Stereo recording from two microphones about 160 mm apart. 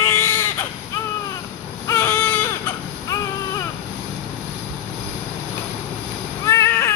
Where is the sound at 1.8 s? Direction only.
20° left (ahead or behind).